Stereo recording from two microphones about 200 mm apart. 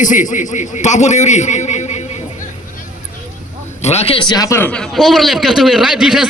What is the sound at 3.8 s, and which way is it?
A man's voice, 30° left (ahead or behind).